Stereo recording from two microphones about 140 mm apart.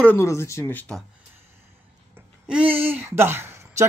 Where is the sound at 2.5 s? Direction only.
10° right (ahead or behind).